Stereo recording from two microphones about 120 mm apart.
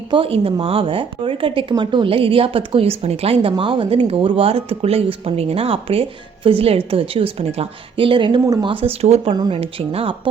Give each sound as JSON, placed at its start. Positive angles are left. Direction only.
{"t": 0.1, "sound": "speech", "side_deg": -50}
{"t": 3.5, "sound": "speech", "side_deg": -45}
{"t": 9.3, "sound": "speech", "side_deg": -40}
{"t": 9.6, "sound": "speech", "side_deg": -55}